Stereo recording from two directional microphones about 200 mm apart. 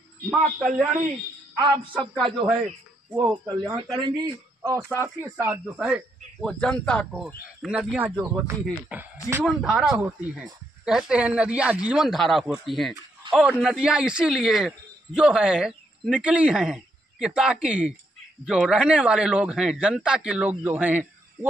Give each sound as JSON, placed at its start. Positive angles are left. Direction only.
{"t": 1.6, "sound": "a man's voice", "side_deg": -25}
{"t": 2.1, "sound": "a man's voice", "side_deg": 0}
{"t": 3.2, "sound": "a man's voice", "side_deg": -20}
{"t": 6.4, "sound": "speech", "side_deg": 5}